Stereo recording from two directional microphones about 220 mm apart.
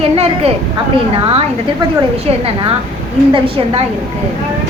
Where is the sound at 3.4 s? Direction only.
25° right (ahead or behind).